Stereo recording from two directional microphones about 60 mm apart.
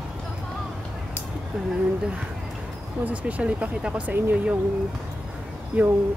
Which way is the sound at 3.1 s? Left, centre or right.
Right.